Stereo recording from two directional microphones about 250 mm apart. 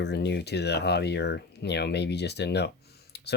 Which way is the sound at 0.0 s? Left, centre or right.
Left.